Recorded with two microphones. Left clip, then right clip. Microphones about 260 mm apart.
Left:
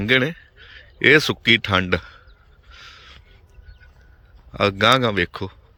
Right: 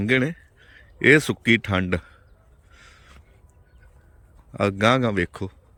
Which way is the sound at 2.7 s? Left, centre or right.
Centre.